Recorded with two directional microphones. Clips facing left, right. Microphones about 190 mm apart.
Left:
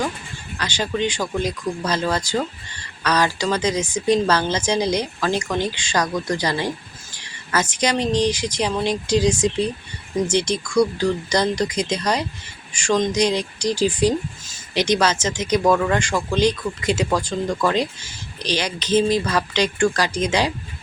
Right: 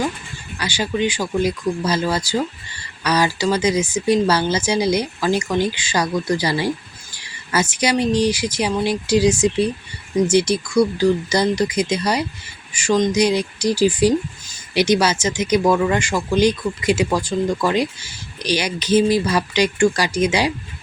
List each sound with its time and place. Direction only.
0.6 s speech: 10° right (ahead or behind)